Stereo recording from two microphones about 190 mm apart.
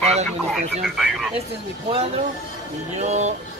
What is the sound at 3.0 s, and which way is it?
Speech, 35° right (ahead or behind).